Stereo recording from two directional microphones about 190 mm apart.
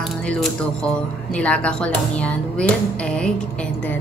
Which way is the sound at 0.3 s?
5° left (ahead or behind).